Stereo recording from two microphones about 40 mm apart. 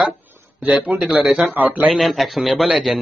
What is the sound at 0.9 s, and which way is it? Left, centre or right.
Speech, centre.